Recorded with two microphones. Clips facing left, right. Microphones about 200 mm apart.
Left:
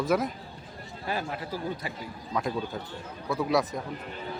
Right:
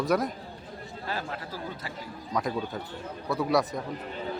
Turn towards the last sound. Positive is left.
turn(degrees=0)  # may be behind; listen again after turning